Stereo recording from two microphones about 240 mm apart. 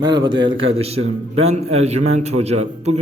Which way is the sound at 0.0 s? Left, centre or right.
Centre.